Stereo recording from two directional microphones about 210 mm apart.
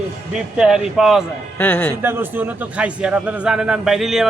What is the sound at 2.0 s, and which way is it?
A man's voice, 10° right (ahead or behind).